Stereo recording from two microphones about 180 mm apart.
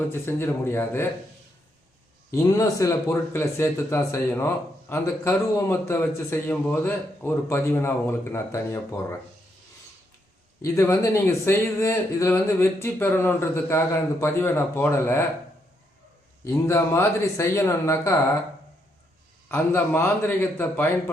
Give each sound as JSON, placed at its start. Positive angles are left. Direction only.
{"t": 0.1, "sound": "speech", "side_deg": 15}
{"t": 2.3, "sound": "speech", "side_deg": 20}
{"t": 10.6, "sound": "speech", "side_deg": 15}
{"t": 16.4, "sound": "speech", "side_deg": 15}
{"t": 19.5, "sound": "speech", "side_deg": 10}